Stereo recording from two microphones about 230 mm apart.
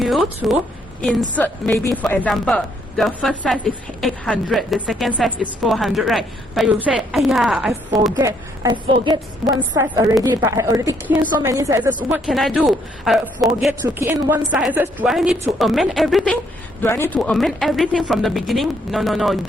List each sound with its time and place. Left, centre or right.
0.0 s speech: centre
1.4 s a woman's voice: centre
8.1 s a woman's voice: centre